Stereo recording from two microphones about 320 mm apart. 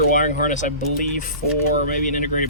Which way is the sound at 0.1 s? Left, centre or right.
Left.